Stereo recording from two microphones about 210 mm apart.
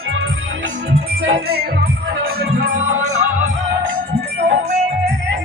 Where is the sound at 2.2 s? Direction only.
45° right (ahead or behind).